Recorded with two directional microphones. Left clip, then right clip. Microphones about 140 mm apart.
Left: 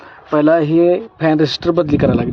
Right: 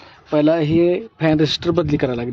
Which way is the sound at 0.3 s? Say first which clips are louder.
Left 4 dB; 25° right (ahead or behind).